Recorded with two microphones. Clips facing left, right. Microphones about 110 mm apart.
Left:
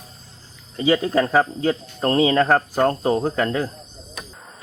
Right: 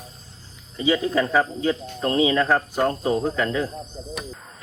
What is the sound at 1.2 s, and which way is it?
Speech, 35° left (ahead or behind).